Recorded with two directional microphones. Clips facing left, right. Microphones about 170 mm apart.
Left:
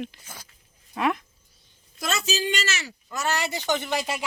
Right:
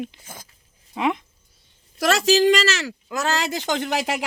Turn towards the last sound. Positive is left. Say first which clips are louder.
# right 4 dB
turn(degrees=-90)